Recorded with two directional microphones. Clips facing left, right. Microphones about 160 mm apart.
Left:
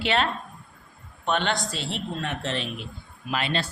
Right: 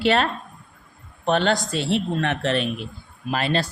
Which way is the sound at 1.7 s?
70° right (ahead or behind).